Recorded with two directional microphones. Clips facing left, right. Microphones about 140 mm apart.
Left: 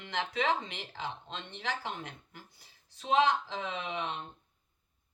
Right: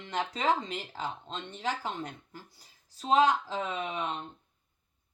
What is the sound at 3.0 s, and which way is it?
Speech, 35° right (ahead or behind).